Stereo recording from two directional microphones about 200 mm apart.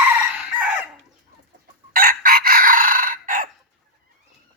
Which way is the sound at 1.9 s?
45° right (ahead or behind).